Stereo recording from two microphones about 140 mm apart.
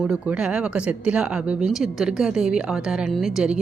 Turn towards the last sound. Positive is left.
turn(degrees=-5)  # may be behind; listen again after turning